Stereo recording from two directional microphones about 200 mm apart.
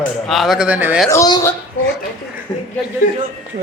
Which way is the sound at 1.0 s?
20° left (ahead or behind).